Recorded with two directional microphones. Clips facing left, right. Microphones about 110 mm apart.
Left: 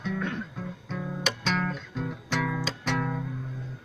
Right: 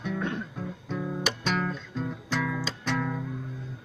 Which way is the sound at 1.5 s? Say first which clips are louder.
Left 1 dB; 5° right (ahead or behind).